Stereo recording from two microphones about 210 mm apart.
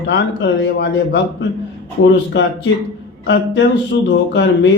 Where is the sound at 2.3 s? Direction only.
55° left (ahead or behind).